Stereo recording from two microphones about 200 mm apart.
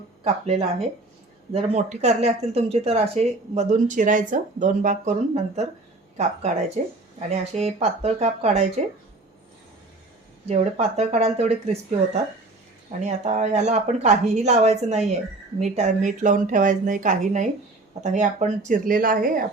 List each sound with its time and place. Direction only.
0.4 s speech: 30° right (ahead or behind)
6.8 s speech: 40° right (ahead or behind)
10.5 s speech: 35° right (ahead or behind)